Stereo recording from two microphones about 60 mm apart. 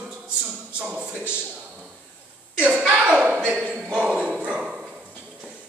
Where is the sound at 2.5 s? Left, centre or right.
Centre.